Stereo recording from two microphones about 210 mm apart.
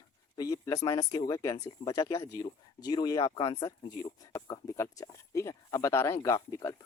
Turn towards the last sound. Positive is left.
turn(degrees=15)  # may be behind; listen again after turning